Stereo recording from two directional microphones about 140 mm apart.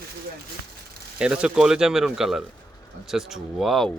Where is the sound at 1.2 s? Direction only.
5° right (ahead or behind).